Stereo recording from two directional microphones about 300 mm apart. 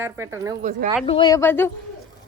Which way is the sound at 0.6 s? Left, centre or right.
Right.